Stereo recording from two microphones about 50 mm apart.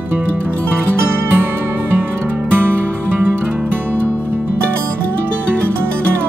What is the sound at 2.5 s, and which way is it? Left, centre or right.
Music, right.